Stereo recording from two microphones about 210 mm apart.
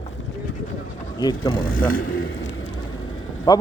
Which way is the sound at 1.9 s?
70° left (ahead or behind).